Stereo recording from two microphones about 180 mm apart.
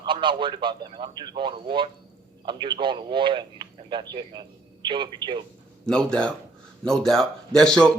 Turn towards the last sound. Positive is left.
turn(degrees=5)  # may be behind; listen again after turning